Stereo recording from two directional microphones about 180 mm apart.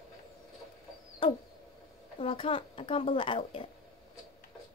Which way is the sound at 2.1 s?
30° left (ahead or behind).